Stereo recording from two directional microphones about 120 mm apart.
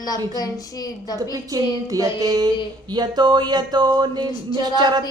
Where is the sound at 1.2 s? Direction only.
30° right (ahead or behind).